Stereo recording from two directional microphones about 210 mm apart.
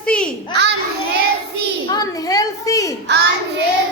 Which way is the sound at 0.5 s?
55° right (ahead or behind).